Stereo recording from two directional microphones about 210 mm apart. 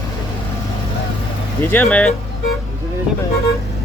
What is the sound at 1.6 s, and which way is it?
Speech, 10° left (ahead or behind).